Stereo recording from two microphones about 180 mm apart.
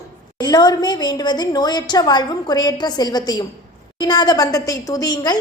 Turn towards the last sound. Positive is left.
turn(degrees=20)  # may be behind; listen again after turning